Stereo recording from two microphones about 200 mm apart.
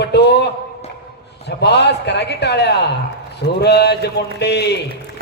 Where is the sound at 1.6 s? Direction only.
60° left (ahead or behind).